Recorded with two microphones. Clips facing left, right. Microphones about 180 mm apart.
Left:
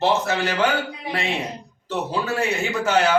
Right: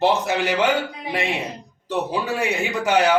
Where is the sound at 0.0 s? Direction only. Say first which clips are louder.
Right 1 dB; 15° right (ahead or behind).